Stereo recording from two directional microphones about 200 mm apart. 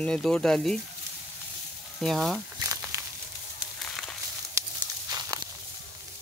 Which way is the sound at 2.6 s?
15° right (ahead or behind).